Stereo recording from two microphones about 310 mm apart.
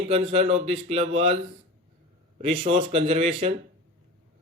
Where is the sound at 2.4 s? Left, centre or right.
Centre.